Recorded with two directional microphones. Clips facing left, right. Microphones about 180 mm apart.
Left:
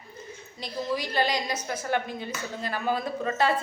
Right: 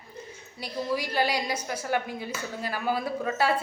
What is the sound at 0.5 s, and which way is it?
A woman's voice, 10° right (ahead or behind).